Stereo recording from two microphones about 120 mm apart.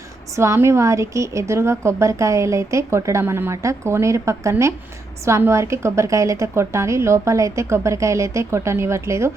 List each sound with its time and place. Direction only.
0.3 s a woman's voice: 25° right (ahead or behind)